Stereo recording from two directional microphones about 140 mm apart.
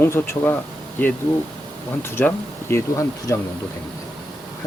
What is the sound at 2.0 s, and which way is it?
Speech, 15° left (ahead or behind).